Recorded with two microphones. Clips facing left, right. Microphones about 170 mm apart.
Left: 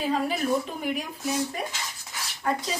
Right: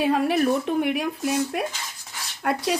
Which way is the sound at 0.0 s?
65° right (ahead or behind).